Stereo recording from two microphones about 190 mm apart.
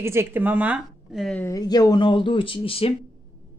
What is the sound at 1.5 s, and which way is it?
Cutlery, 20° left (ahead or behind).